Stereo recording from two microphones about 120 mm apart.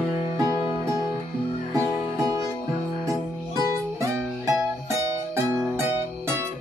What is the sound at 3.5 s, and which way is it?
Music, 25° right (ahead or behind).